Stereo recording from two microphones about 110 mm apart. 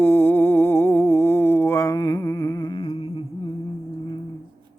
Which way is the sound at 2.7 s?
55° left (ahead or behind).